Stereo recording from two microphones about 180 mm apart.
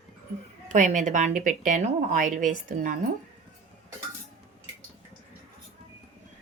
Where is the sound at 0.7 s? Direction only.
45° right (ahead or behind).